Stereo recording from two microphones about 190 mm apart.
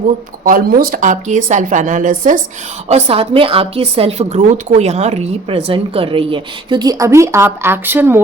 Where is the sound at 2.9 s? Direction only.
35° right (ahead or behind).